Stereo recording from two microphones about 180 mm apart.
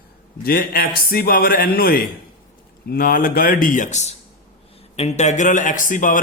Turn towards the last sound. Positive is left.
turn(degrees=50)  # may be behind; listen again after turning